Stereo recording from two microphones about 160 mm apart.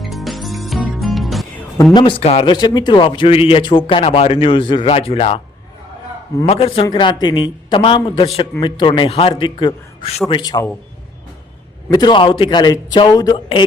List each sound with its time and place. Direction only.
0.0 s music: centre (ahead or behind)
1.8 s speech: 25° left (ahead or behind)
6.4 s a woman's voice: 35° left (ahead or behind)
11.9 s a woman's voice: 30° left (ahead or behind)